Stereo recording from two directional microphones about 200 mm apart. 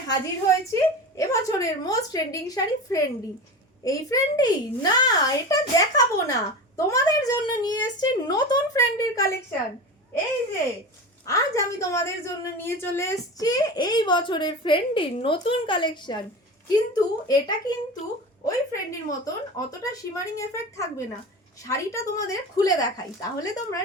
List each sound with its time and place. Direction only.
0.1 s a woman's voice: 15° left (ahead or behind)
11.3 s a woman's voice: 15° left (ahead or behind)